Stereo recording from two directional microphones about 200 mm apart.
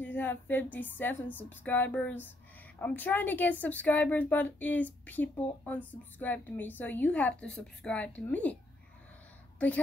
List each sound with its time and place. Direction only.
0.0 s speech: 10° left (ahead or behind)